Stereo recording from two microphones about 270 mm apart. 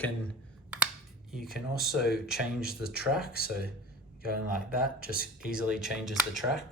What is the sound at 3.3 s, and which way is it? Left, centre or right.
Speech, right.